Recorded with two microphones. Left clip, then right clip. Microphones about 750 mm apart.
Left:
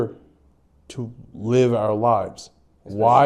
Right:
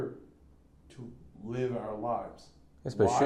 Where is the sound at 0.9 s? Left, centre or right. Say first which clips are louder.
Left 15 dB; left.